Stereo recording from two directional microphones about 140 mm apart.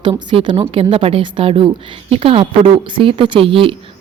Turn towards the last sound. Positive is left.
turn(degrees=-40)  # may be behind; listen again after turning